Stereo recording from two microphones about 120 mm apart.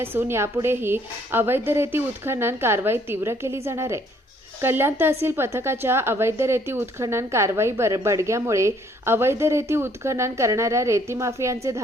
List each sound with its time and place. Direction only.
0.0 s a woman's voice: 20° right (ahead or behind)